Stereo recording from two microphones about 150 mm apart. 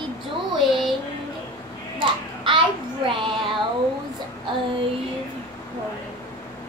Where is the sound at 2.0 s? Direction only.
35° right (ahead or behind).